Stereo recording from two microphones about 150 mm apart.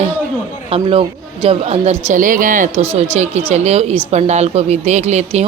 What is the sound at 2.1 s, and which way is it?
Speech, 60° right (ahead or behind).